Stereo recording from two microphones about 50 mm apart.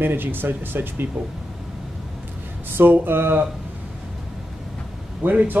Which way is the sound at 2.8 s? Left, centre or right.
Right.